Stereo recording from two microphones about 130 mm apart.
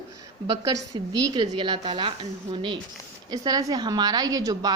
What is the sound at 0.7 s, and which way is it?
A woman's voice, 30° right (ahead or behind).